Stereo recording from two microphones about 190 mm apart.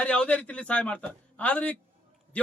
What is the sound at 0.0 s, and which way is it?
A man's voice, 5° left (ahead or behind).